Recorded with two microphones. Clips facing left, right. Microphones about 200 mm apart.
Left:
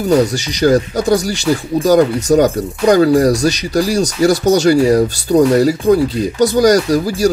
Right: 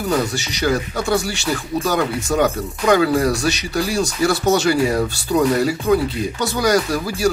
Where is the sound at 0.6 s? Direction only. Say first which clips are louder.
Left 8 dB; 40° left (ahead or behind).